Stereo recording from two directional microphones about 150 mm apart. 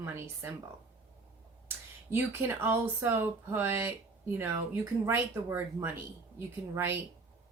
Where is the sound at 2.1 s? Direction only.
15° right (ahead or behind).